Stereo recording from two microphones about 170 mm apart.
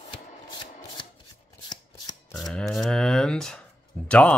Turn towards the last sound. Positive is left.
turn(degrees=5)  # may be behind; listen again after turning